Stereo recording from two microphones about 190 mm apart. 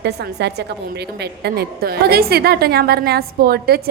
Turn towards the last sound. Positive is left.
turn(degrees=-55)  # may be behind; listen again after turning